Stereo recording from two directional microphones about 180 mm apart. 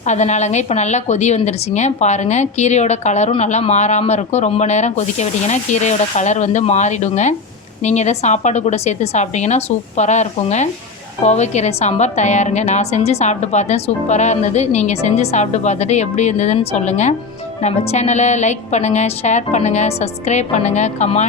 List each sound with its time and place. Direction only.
0.1 s a woman's voice: 40° left (ahead or behind)